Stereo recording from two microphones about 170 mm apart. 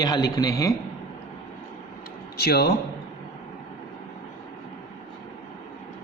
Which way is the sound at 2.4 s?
70° left (ahead or behind).